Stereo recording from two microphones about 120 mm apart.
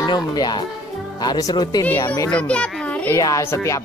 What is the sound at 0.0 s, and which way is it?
Speech, 35° left (ahead or behind).